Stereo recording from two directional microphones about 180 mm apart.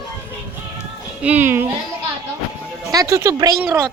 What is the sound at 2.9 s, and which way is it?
Speech, 20° right (ahead or behind).